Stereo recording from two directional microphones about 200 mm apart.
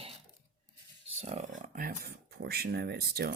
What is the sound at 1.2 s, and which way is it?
Speech, 35° right (ahead or behind).